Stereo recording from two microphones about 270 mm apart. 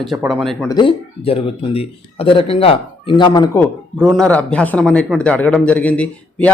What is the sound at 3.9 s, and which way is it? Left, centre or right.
Speech, centre.